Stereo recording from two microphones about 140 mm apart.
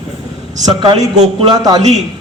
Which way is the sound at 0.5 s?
30° right (ahead or behind).